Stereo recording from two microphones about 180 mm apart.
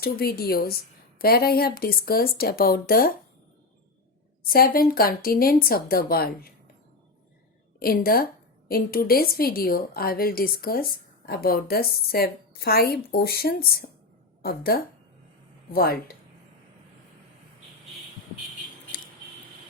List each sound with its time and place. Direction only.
0.0 s a woman's voice: 55° left (ahead or behind)
4.4 s a woman's voice: 55° left (ahead or behind)
7.8 s a woman's voice: 55° left (ahead or behind)